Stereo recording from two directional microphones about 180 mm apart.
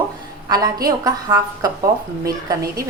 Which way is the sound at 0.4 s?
20° right (ahead or behind).